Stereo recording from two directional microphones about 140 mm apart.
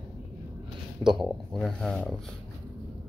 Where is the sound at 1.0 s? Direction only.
Centre (ahead or behind).